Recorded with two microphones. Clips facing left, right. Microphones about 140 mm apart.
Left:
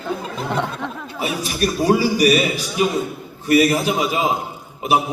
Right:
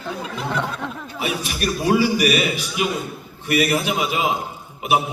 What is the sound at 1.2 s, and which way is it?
A man's voice, 40° left (ahead or behind).